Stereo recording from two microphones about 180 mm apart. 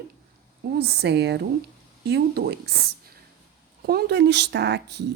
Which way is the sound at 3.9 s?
65° right (ahead or behind).